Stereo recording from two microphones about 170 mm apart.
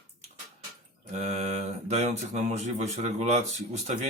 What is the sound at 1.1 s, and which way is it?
Speech, 40° right (ahead or behind).